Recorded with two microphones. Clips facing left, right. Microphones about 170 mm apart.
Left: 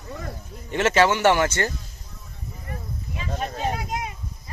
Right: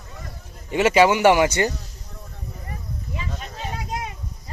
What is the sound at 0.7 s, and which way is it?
Speech, 10° right (ahead or behind).